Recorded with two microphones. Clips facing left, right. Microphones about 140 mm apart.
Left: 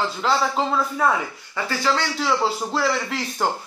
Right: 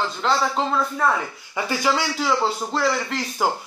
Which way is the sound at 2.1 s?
Centre (ahead or behind).